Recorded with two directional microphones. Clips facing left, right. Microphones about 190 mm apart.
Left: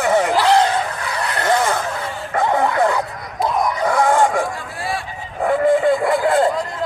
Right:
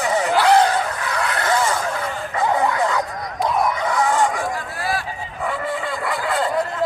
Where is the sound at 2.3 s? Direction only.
50° left (ahead or behind).